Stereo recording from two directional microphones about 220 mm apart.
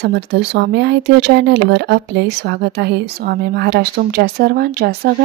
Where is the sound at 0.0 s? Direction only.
50° right (ahead or behind).